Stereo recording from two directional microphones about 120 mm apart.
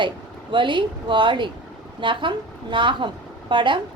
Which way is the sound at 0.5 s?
40° right (ahead or behind).